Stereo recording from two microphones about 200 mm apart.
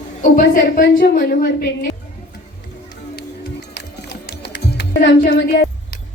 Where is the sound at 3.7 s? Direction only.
55° left (ahead or behind).